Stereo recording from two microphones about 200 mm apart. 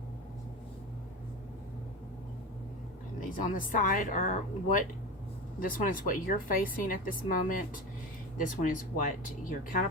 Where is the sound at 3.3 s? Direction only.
45° left (ahead or behind).